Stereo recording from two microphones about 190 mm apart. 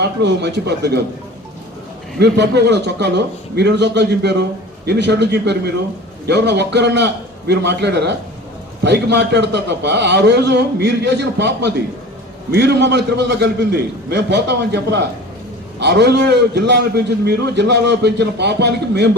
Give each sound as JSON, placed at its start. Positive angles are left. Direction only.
{"t": 0.0, "sound": "a man's voice", "side_deg": -65}
{"t": 2.1, "sound": "a man's voice", "side_deg": -60}